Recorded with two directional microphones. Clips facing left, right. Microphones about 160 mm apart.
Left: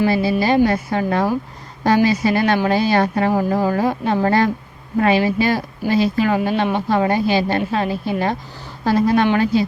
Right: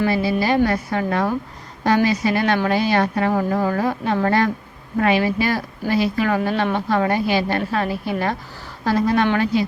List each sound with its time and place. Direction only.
0.1 s a woman's voice: 30° left (ahead or behind)